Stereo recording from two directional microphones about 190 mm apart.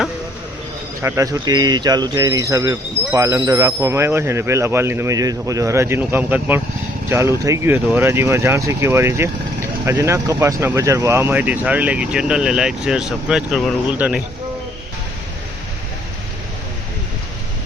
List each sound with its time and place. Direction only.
1.0 s speech: 15° right (ahead or behind)